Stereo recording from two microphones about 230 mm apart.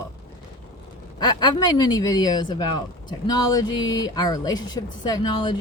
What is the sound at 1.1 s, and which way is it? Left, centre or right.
Speech, centre.